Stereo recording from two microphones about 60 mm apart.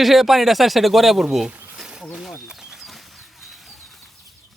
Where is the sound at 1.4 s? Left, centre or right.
Centre.